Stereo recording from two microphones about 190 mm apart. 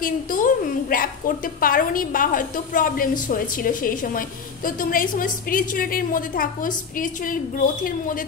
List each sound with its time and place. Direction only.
0.0 s a woman's voice: 45° left (ahead or behind)